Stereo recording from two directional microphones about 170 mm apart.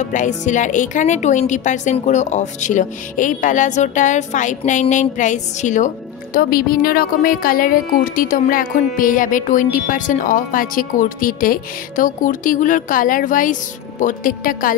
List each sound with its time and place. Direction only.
0.0 s speech: 45° left (ahead or behind)
6.3 s speech: 60° left (ahead or behind)